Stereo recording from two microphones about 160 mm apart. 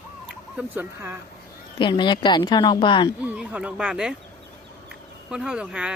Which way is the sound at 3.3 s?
10° right (ahead or behind).